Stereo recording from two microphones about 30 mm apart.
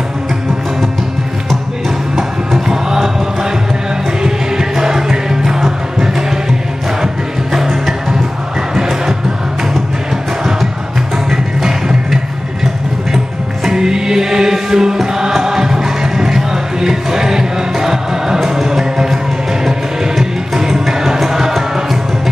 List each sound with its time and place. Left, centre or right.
2.1 s music: centre
4.2 s music: centre
8.7 s music: centre
11.2 s music: centre
13.7 s music: right
20.5 s music: centre